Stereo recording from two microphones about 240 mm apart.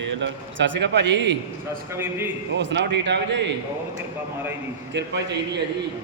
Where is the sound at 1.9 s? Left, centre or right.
Centre.